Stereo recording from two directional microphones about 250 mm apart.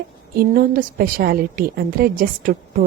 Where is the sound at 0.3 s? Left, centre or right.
Right.